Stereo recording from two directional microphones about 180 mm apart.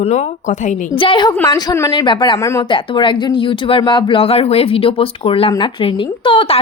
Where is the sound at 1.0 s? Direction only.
25° left (ahead or behind).